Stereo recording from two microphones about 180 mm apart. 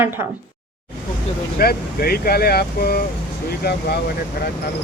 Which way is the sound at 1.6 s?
55° left (ahead or behind).